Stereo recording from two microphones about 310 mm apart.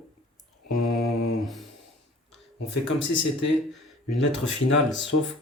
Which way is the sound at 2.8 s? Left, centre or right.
Left.